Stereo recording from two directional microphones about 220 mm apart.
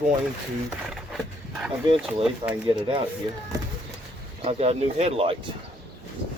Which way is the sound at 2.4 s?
20° right (ahead or behind).